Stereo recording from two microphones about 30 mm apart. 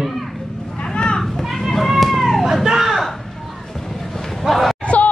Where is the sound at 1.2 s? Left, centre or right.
Centre.